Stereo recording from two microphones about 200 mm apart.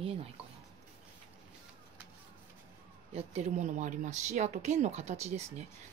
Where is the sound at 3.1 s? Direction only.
35° right (ahead or behind).